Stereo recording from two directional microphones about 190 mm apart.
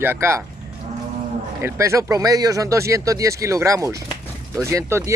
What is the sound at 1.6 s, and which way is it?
Speech, 15° right (ahead or behind).